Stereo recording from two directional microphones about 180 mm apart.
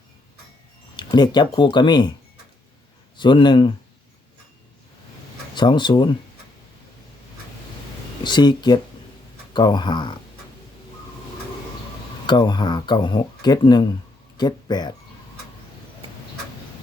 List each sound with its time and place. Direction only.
0.9 s speech: 25° left (ahead or behind)
3.2 s speech: 25° left (ahead or behind)
5.5 s speech: 25° left (ahead or behind)
8.2 s speech: 25° left (ahead or behind)
12.2 s speech: 25° left (ahead or behind)